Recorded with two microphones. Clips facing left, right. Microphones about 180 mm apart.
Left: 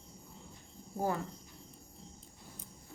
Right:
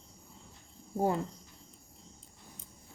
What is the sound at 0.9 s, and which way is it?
Speech, 25° right (ahead or behind).